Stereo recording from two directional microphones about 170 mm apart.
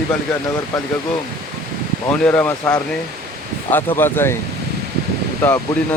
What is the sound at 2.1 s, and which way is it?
Speech, 10° left (ahead or behind).